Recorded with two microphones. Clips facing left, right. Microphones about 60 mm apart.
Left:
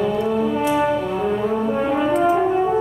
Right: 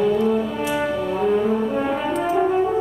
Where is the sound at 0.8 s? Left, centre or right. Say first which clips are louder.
Left 2 dB; centre.